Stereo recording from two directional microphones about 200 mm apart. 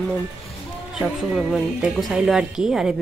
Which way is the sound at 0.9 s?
5° right (ahead or behind).